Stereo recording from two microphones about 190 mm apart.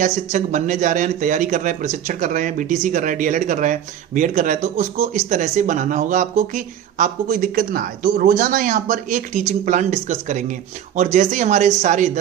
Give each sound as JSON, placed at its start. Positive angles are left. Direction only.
{"t": 0.0, "sound": "speech", "side_deg": -40}